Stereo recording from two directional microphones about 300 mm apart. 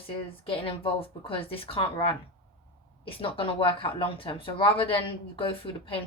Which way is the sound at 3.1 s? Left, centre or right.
Centre.